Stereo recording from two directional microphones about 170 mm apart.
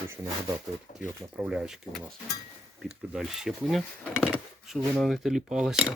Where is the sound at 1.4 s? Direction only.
5° right (ahead or behind).